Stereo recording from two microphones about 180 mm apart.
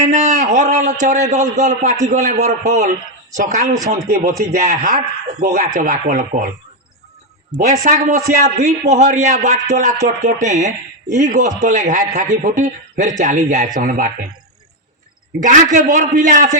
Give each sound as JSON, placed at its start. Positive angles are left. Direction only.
{"t": 0.0, "sound": "a man's voice", "side_deg": -40}
{"t": 5.6, "sound": "a man's voice", "side_deg": -55}
{"t": 7.5, "sound": "a man's voice", "side_deg": -40}
{"t": 13.8, "sound": "a man's voice", "side_deg": -55}
{"t": 15.4, "sound": "a man's voice", "side_deg": -45}